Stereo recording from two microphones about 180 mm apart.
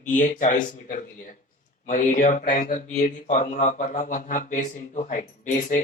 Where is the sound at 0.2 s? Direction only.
45° left (ahead or behind).